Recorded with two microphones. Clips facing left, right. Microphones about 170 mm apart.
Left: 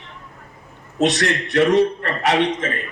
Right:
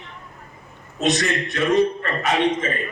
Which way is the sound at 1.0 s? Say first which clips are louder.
Left 2 dB; 80° left.